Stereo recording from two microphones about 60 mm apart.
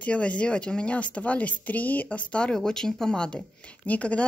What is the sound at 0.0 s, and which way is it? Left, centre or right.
Speech, left.